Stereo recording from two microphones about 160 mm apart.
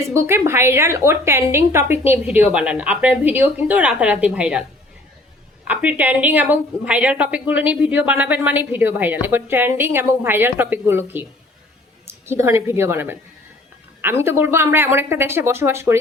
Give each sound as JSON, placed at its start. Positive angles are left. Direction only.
{"t": 0.1, "sound": "a woman's voice", "side_deg": -15}
{"t": 5.6, "sound": "a woman's voice", "side_deg": -10}